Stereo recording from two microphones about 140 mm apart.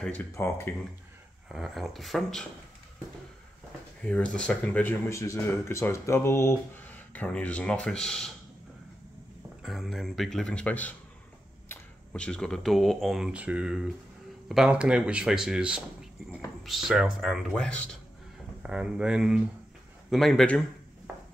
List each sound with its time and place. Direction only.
0.0 s speech: 10° left (ahead or behind)
1.5 s speech: centre (ahead or behind)
4.0 s speech: 10° left (ahead or behind)
9.6 s speech: centre (ahead or behind)
18.6 s speech: 5° right (ahead or behind)